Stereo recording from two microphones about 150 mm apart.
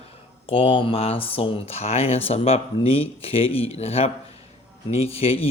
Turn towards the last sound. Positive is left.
turn(degrees=40)  # may be behind; listen again after turning